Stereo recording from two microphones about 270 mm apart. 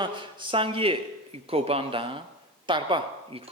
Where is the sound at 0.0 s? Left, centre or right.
Centre.